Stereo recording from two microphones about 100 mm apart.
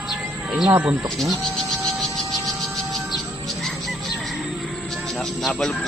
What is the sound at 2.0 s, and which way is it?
Music, centre (ahead or behind).